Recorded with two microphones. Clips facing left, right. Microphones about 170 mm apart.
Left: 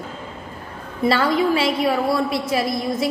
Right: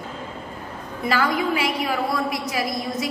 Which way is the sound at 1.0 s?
25° left (ahead or behind).